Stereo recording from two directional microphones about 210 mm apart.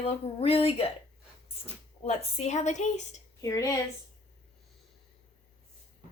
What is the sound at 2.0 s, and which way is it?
A woman's voice, 30° left (ahead or behind).